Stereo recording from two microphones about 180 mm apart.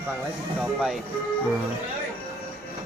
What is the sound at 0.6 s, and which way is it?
Speech, centre (ahead or behind).